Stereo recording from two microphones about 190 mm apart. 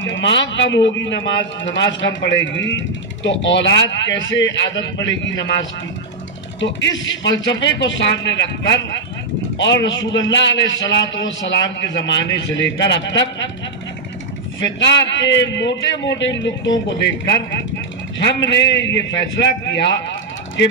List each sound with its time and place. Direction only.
0.0 s a man's voice: 75° left (ahead or behind)
6.6 s a man's voice: 75° left (ahead or behind)
14.8 s a man's voice: 70° left (ahead or behind)
18.2 s a man's voice: 70° left (ahead or behind)
19.7 s a sound: 70° left (ahead or behind)